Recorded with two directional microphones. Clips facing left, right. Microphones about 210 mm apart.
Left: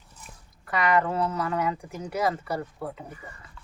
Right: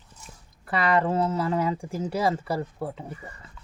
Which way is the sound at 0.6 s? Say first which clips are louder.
Right 1 dB; 30° right (ahead or behind).